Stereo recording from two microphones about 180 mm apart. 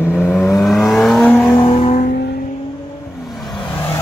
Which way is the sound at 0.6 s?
Centre (ahead or behind).